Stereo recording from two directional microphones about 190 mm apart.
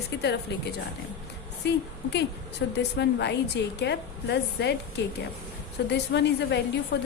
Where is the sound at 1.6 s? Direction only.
65° left (ahead or behind).